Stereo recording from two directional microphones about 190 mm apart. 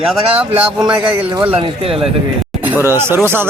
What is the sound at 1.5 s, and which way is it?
Speech, 30° right (ahead or behind).